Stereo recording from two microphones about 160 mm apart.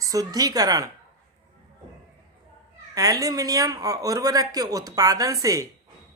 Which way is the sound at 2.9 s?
20° right (ahead or behind).